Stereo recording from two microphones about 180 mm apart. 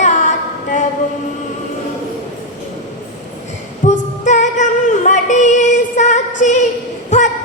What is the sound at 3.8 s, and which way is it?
Music, 40° left (ahead or behind).